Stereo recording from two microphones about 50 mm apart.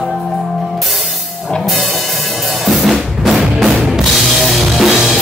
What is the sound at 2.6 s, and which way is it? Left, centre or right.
Drum kit, centre.